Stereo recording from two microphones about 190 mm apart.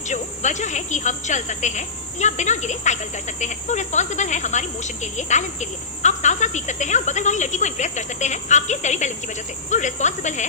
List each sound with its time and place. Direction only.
0.1 s a woman's voice: 40° left (ahead or behind)